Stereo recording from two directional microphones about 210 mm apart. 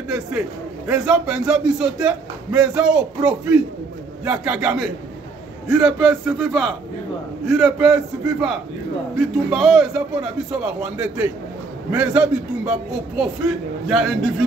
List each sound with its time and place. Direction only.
0.1 s a man's voice: 5° right (ahead or behind)
4.2 s a man's voice: 5° right (ahead or behind)